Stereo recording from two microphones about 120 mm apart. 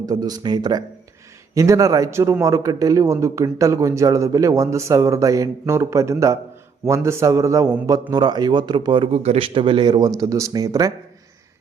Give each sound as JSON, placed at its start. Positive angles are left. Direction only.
{"t": 0.0, "sound": "a man's voice", "side_deg": -30}
{"t": 8.1, "sound": "speech", "side_deg": -35}
{"t": 9.2, "sound": "a man's voice", "side_deg": -60}
{"t": 9.6, "sound": "speech", "side_deg": -45}
{"t": 10.2, "sound": "a man's voice", "side_deg": -30}